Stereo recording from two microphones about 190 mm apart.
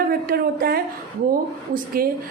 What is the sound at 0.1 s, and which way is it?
A woman's voice, 50° right (ahead or behind).